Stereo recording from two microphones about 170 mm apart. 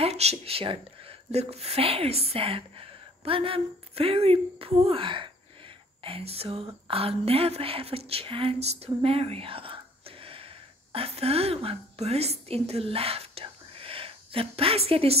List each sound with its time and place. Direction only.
0.0 s speech: 40° right (ahead or behind)